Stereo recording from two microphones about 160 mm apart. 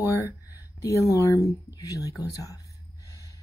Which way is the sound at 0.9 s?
20° left (ahead or behind).